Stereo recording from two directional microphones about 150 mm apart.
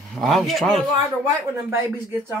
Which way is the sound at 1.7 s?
15° right (ahead or behind).